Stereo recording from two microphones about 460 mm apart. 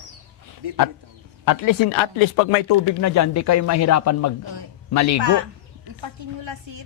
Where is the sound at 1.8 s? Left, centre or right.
Left.